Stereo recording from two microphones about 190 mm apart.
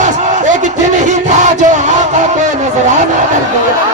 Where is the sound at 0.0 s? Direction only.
40° right (ahead or behind).